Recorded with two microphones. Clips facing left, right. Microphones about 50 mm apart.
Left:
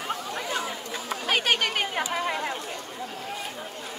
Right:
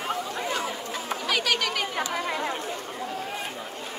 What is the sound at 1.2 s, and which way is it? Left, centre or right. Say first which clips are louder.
Chatter: left 2 dB; left.